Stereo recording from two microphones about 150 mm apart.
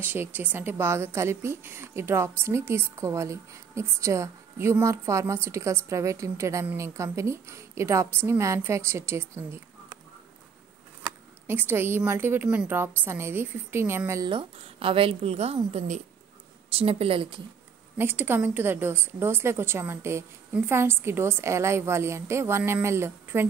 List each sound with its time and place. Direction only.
0.0 s a woman's voice: 15° right (ahead or behind)
11.4 s a woman's voice: 15° right (ahead or behind)
14.3 s a woman's voice: 40° right (ahead or behind)
17.9 s a woman's voice: 15° right (ahead or behind)